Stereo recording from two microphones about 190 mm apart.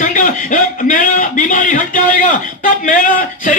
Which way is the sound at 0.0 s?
45° left (ahead or behind).